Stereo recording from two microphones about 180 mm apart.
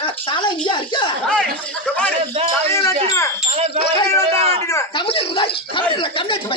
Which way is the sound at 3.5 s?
35° right (ahead or behind).